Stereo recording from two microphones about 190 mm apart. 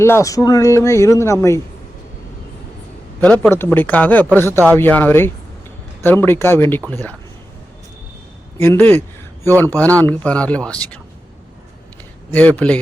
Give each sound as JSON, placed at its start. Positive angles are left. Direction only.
{"t": 0.0, "sound": "speech", "side_deg": 15}
{"t": 3.2, "sound": "speech", "side_deg": 5}
{"t": 8.6, "sound": "a man's voice", "side_deg": 10}
{"t": 12.3, "sound": "speech", "side_deg": 10}